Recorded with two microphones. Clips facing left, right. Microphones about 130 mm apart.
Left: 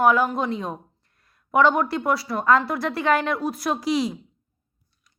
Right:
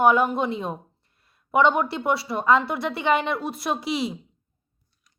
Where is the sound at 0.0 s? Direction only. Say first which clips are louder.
Even; centre (ahead or behind).